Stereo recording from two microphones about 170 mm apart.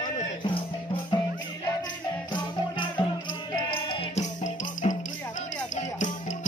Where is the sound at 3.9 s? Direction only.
40° left (ahead or behind).